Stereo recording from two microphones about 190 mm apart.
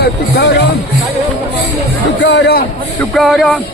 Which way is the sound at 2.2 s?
65° left (ahead or behind).